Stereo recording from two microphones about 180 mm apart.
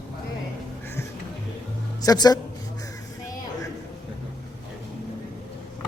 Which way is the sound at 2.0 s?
20° left (ahead or behind).